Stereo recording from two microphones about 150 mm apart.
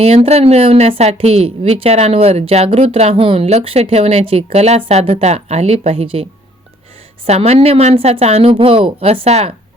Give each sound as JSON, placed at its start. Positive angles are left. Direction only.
{"t": 0.0, "sound": "a woman's voice", "side_deg": -45}
{"t": 7.3, "sound": "a woman's voice", "side_deg": -45}